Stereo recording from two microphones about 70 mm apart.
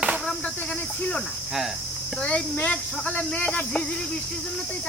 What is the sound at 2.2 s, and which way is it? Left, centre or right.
Speech, centre.